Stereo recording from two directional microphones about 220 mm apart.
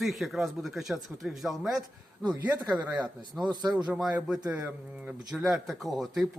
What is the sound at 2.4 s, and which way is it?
Speech, 15° right (ahead or behind).